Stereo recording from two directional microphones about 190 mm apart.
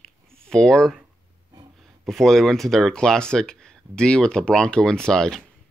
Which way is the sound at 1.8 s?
Centre (ahead or behind).